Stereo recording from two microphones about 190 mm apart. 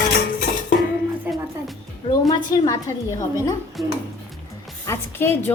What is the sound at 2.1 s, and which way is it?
A woman's voice, 20° left (ahead or behind).